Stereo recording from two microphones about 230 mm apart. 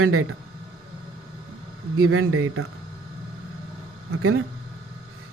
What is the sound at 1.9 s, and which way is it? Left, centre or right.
Speech, right.